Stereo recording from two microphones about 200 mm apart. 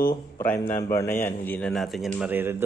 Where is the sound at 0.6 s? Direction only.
40° left (ahead or behind).